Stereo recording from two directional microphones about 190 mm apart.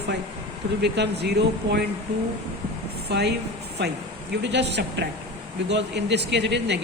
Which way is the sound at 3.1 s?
60° right (ahead or behind).